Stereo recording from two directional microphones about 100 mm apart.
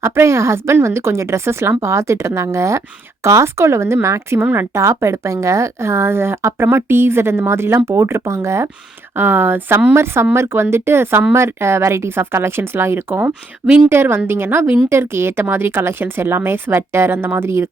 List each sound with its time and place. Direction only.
0.0 s speech: 30° right (ahead or behind)